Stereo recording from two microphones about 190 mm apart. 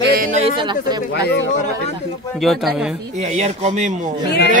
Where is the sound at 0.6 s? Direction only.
20° right (ahead or behind).